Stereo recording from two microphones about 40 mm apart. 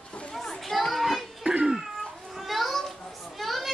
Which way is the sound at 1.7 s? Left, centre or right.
Centre.